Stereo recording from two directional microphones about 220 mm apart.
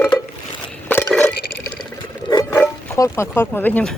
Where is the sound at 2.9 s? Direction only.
15° left (ahead or behind).